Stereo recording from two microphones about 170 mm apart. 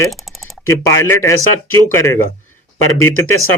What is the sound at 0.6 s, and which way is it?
Speech, 15° left (ahead or behind).